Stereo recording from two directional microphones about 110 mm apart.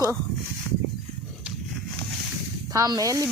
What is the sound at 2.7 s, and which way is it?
Speech, 35° right (ahead or behind).